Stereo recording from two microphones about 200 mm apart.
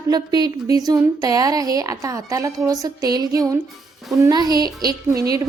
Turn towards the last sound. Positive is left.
turn(degrees=-20)  # may be behind; listen again after turning